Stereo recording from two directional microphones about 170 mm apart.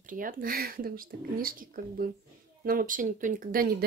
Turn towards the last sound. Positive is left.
turn(degrees=-55)  # may be behind; listen again after turning